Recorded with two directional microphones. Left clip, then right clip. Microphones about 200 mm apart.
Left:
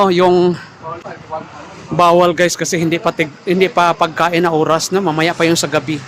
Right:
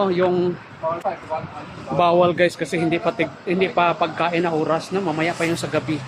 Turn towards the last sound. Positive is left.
turn(degrees=60)  # may be behind; listen again after turning